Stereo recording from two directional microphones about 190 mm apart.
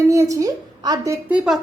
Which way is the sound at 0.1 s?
15° right (ahead or behind).